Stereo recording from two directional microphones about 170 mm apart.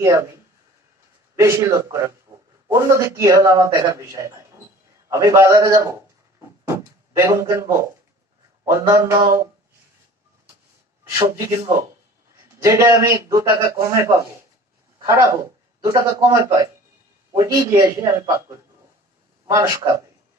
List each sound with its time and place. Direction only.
0.0 s a man's voice: 15° right (ahead or behind)
1.3 s a man's voice: 15° right (ahead or behind)
11.1 s a man's voice: 20° right (ahead or behind)
12.6 s a man's voice: 15° right (ahead or behind)
17.3 s a man's voice: 20° right (ahead or behind)
19.4 s a man's voice: 20° right (ahead or behind)